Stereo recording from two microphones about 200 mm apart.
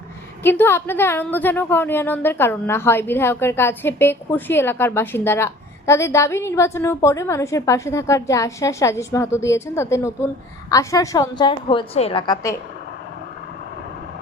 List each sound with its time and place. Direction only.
0.4 s a woman's voice: 10° left (ahead or behind)